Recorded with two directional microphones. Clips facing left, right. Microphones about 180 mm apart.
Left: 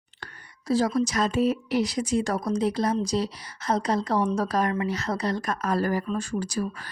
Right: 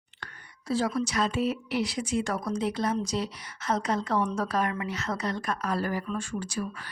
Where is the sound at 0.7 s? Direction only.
40° left (ahead or behind).